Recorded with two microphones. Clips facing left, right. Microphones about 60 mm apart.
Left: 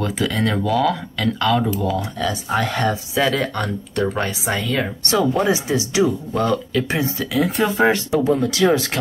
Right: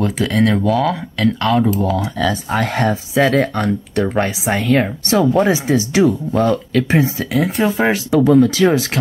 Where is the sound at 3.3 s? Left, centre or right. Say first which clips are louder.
Right 6 dB; right.